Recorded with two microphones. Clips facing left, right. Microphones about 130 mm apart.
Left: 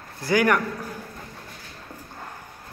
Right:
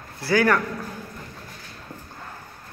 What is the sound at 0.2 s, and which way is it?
Speech, 15° left (ahead or behind).